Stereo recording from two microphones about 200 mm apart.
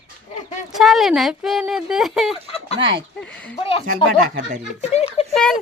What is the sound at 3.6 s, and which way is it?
A child's voice, 25° left (ahead or behind).